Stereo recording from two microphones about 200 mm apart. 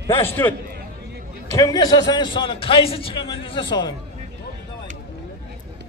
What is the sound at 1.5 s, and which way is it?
A man's voice, 20° left (ahead or behind).